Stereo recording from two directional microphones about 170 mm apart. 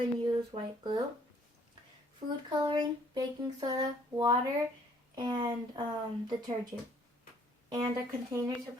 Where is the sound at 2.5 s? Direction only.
25° right (ahead or behind).